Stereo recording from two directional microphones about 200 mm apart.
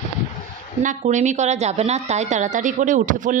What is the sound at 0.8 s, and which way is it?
A woman's voice, 40° right (ahead or behind).